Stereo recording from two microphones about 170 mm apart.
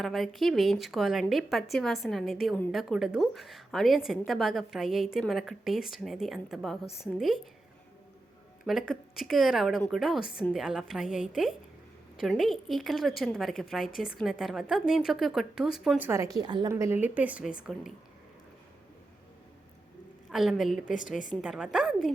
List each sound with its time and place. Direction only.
0.0 s a woman's voice: centre (ahead or behind)
8.6 s a woman's voice: centre (ahead or behind)
16.0 s a woman's voice: 15° right (ahead or behind)
20.3 s a woman's voice: centre (ahead or behind)